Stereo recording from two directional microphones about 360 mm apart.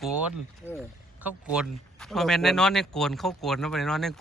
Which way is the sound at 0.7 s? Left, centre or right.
Centre.